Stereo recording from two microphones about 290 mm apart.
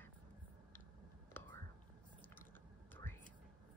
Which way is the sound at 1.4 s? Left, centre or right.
Centre.